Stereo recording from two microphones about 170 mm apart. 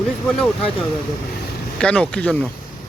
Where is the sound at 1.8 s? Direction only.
5° left (ahead or behind).